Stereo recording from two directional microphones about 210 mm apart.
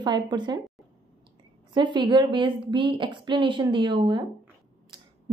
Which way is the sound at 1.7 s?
20° right (ahead or behind).